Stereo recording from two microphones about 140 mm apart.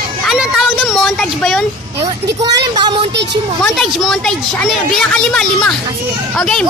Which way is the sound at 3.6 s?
Centre (ahead or behind).